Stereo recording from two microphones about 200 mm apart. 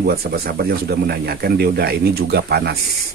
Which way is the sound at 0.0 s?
50° right (ahead or behind).